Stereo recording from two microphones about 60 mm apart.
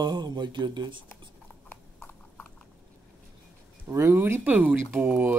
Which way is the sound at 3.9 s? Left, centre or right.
Right.